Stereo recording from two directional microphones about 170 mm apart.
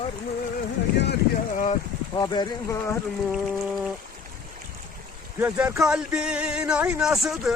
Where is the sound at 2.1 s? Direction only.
25° left (ahead or behind).